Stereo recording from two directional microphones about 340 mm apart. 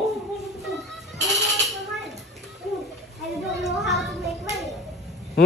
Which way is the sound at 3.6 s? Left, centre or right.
Centre.